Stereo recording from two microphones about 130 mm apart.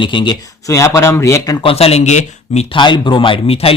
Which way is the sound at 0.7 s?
20° left (ahead or behind).